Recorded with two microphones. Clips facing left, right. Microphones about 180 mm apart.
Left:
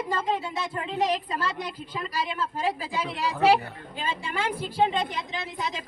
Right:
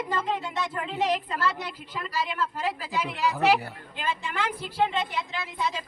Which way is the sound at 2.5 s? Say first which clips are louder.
Left 1 dB; 30° left (ahead or behind).